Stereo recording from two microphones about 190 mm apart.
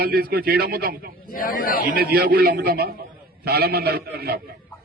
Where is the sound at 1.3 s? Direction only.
50° left (ahead or behind).